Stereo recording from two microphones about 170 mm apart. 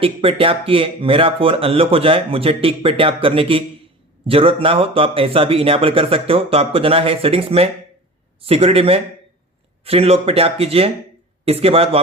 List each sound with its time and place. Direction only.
0.0 s speech: 35° right (ahead or behind)